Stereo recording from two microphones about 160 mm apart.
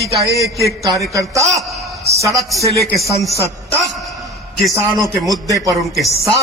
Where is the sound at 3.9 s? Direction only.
Centre (ahead or behind).